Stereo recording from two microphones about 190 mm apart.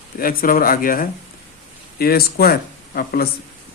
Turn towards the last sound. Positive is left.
turn(degrees=50)  # may be behind; listen again after turning